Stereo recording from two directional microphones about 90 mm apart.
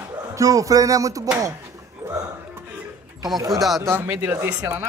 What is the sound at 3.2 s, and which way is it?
Speech, 45° right (ahead or behind).